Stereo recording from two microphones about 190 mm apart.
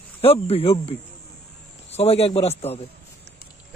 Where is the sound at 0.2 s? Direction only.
30° left (ahead or behind).